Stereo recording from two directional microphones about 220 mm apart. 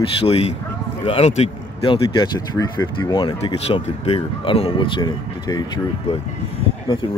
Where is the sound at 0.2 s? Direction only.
25° left (ahead or behind).